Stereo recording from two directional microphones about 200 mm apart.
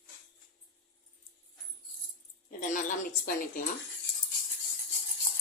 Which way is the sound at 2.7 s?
40° left (ahead or behind).